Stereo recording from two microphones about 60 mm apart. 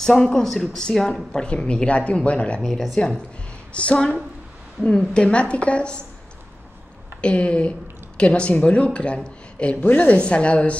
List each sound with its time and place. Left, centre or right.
0.0 s speech: centre
2.6 s speech: centre
3.7 s speech: centre
5.1 s speech: centre
7.2 s speech: centre